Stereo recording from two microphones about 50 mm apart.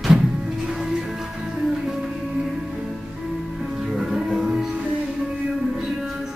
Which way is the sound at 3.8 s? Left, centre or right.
Centre.